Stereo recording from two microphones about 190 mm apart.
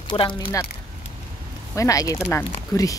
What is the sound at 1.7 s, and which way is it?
Speech, 15° left (ahead or behind).